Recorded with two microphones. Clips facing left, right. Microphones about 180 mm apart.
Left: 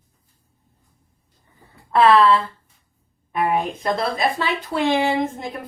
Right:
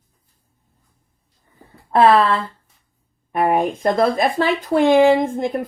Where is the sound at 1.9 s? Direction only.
45° right (ahead or behind).